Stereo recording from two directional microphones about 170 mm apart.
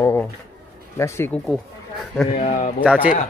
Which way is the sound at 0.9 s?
15° left (ahead or behind).